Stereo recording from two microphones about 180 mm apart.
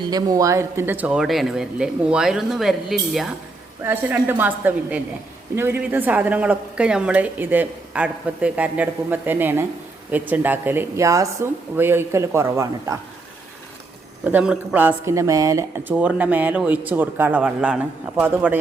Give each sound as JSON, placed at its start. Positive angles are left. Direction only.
{"t": 0.1, "sound": "speech", "side_deg": -20}
{"t": 3.8, "sound": "a woman's voice", "side_deg": -10}
{"t": 14.3, "sound": "a woman's voice", "side_deg": -10}